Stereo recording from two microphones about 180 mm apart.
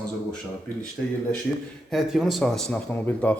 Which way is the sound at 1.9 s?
Centre (ahead or behind).